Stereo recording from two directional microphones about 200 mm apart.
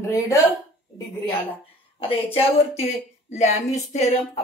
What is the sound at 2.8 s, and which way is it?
Speech, 35° left (ahead or behind).